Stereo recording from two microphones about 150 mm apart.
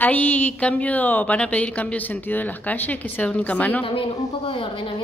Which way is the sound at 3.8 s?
35° left (ahead or behind).